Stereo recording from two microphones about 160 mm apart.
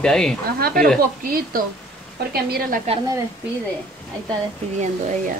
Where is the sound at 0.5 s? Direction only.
70° right (ahead or behind).